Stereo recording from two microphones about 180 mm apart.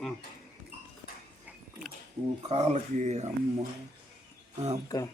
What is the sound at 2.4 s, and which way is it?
Speech, 35° right (ahead or behind).